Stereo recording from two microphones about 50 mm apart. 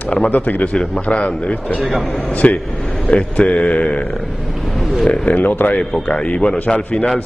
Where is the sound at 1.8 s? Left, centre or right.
Centre.